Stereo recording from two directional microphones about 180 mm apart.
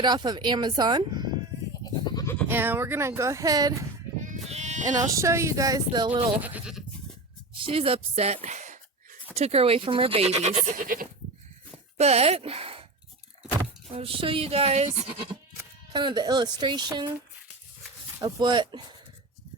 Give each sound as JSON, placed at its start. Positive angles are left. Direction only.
{"t": 0.0, "sound": "speech", "side_deg": -25}
{"t": 1.8, "sound": "goat", "side_deg": 20}
{"t": 2.5, "sound": "speech", "side_deg": -10}
{"t": 4.4, "sound": "sheep", "side_deg": -40}
{"t": 4.9, "sound": "speech", "side_deg": -20}
{"t": 6.4, "sound": "speech", "side_deg": -5}
{"t": 7.6, "sound": "speech", "side_deg": -30}
{"t": 11.9, "sound": "speech", "side_deg": -35}
{"t": 13.9, "sound": "speech", "side_deg": -30}
{"t": 15.9, "sound": "speech", "side_deg": -25}
{"t": 18.2, "sound": "speech", "side_deg": -25}